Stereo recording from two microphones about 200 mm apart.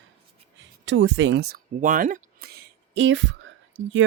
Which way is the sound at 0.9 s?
65° right (ahead or behind).